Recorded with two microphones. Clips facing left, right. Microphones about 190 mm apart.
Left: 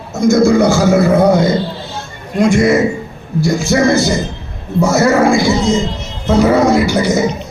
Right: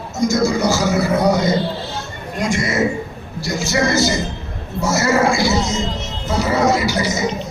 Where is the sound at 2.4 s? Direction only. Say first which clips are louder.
Left 8 dB; 55° left (ahead or behind).